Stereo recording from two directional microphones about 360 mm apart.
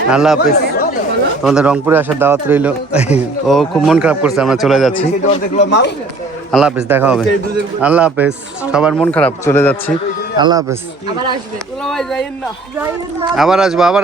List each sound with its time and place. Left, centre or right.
0.1 s a man's voice: centre
0.3 s chatter: left
1.5 s a man's voice: centre
5.5 s speech: left
6.5 s a man's voice: centre
10.3 s speech: centre
11.9 s a man's voice: centre